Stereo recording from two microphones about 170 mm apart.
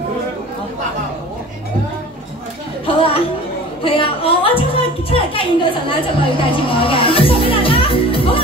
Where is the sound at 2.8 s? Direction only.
35° left (ahead or behind).